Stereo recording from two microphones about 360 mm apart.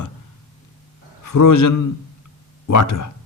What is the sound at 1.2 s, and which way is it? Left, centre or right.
A man's voice, left.